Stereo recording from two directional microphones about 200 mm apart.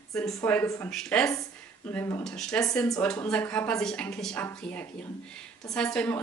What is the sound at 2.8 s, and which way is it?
Speech, 15° left (ahead or behind).